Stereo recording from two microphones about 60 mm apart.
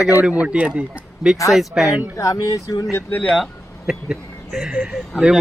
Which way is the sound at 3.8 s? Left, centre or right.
Centre.